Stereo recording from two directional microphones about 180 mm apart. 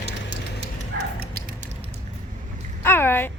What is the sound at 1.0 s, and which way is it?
Dog, 60° right (ahead or behind).